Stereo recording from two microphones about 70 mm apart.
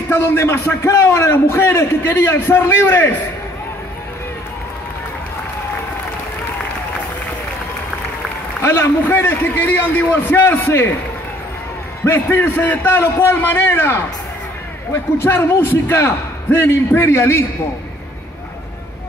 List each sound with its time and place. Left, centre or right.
0.1 s a man's voice: left
8.5 s a man's voice: left
12.0 s a man's voice: left
15.1 s a man's voice: left